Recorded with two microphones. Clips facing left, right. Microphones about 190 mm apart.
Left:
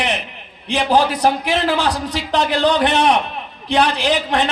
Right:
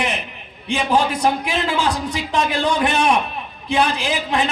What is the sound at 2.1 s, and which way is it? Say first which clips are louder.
A man's voice: left 2 dB; 85° left.